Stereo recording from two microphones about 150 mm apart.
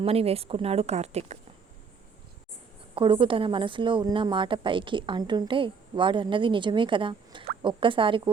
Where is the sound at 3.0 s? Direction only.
35° right (ahead or behind).